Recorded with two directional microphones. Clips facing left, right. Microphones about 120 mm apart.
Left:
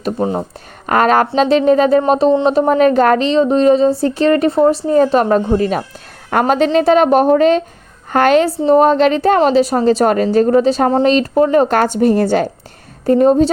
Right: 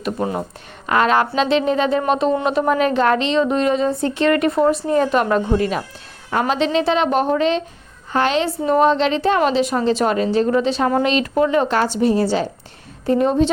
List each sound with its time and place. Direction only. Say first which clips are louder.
0.2 s speech: left 5 dB; 25° left (ahead or behind)
0.9 s a woman's voice: left 4 dB; 45° left (ahead or behind)
6.3 s a woman's voice: left 5 dB; 60° left (ahead or behind)
6.7 s a woman's voice: left 8 dB; 45° left (ahead or behind)
8.6 s a woman's voice: left 4 dB; 30° left (ahead or behind)
8.9 s a woman's voice: left 5 dB; 45° left (ahead or behind)
13.1 s a woman's voice: left 6 dB; 40° left (ahead or behind)